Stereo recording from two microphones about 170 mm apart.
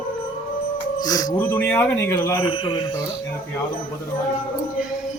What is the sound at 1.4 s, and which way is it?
A man's voice, 10° left (ahead or behind).